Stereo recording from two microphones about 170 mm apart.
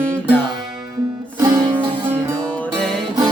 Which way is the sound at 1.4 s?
25° right (ahead or behind).